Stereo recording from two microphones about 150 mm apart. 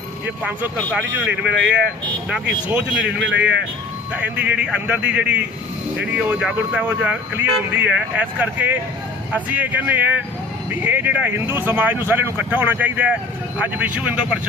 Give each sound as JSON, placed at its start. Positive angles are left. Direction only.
{"t": 0.9, "sound": "speech", "side_deg": -10}